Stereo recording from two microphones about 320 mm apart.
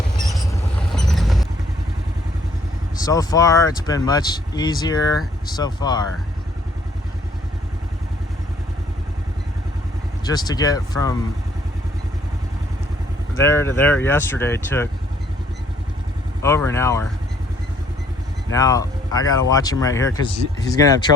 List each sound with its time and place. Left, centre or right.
0.9 s vehicle: centre
3.0 s speech: centre
10.2 s speech: centre
13.4 s speech: centre
16.4 s speech: centre
18.5 s speech: centre